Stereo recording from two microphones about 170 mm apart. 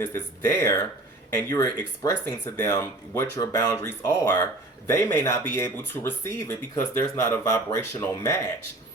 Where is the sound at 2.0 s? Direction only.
20° left (ahead or behind).